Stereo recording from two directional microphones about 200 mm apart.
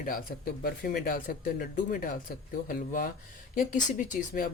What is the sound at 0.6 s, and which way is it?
Speech, 50° left (ahead or behind).